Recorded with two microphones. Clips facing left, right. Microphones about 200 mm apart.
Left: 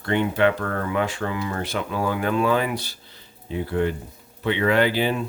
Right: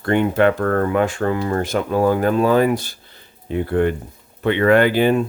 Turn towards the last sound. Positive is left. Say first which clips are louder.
# right 6 dB
turn(degrees=-50)  # may be behind; listen again after turning